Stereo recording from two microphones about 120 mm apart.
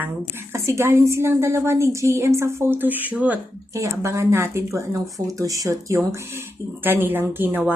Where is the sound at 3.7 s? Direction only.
25° right (ahead or behind).